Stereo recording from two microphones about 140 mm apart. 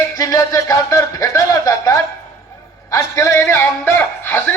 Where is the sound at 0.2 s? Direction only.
25° left (ahead or behind).